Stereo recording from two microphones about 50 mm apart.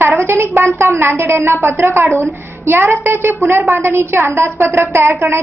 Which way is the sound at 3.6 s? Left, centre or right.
Right.